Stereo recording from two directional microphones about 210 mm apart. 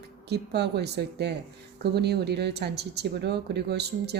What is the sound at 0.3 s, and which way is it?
Speech, 50° right (ahead or behind).